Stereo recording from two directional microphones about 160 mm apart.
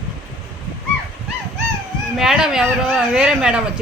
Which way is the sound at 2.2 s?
5° right (ahead or behind).